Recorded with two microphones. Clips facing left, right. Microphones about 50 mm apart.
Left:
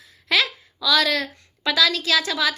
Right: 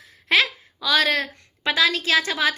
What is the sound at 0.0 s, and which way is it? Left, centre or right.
A woman's voice, right.